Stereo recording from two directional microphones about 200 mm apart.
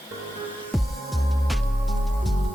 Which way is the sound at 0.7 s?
Centre (ahead or behind).